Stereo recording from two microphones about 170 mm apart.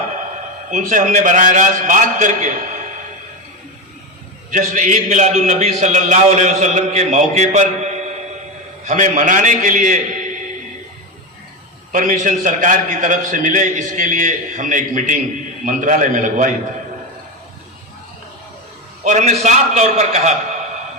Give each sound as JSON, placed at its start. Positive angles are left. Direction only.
{"t": 0.7, "sound": "a man's voice", "side_deg": -50}
{"t": 4.5, "sound": "a man's voice", "side_deg": -50}
{"t": 11.9, "sound": "a man's voice", "side_deg": -50}
{"t": 19.0, "sound": "a man's voice", "side_deg": -45}